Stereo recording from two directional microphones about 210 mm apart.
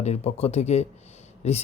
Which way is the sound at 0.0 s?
30° left (ahead or behind).